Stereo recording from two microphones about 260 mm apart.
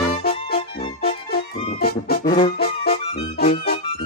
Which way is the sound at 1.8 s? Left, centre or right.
Left.